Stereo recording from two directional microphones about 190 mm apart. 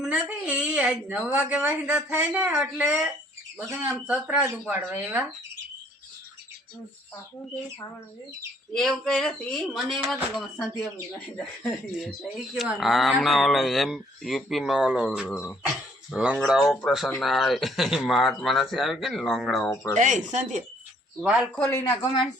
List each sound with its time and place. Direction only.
0.0 s a woman's voice: 5° right (ahead or behind)
8.7 s speech: 5° left (ahead or behind)
19.7 s speech: 15° left (ahead or behind)
20.0 s speech: 40° right (ahead or behind)
21.2 s speech: 5° right (ahead or behind)
21.5 s speech: 10° left (ahead or behind)